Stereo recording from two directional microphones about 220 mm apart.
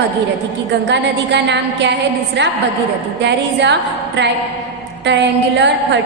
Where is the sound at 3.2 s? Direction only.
50° right (ahead or behind).